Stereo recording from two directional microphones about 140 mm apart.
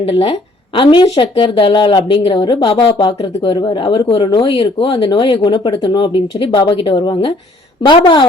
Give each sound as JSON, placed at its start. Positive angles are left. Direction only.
{"t": 0.0, "sound": "speech", "side_deg": 40}